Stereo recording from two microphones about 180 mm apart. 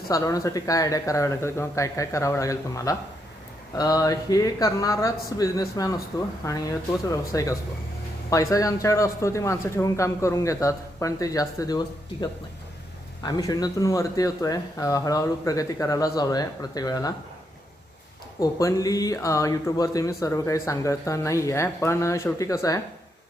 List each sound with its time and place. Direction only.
0.1 s speech: 20° left (ahead or behind)
13.2 s speech: 20° left (ahead or behind)
18.3 s speech: 20° left (ahead or behind)